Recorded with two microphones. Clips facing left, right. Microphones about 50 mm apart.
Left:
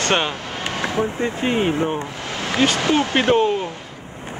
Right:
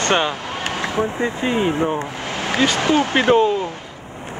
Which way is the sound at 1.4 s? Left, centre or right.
Left.